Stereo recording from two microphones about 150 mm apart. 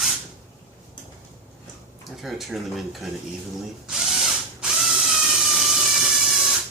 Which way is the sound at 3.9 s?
Centre (ahead or behind).